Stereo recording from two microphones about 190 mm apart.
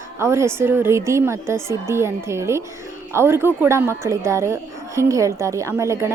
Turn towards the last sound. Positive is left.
turn(degrees=-15)  # may be behind; listen again after turning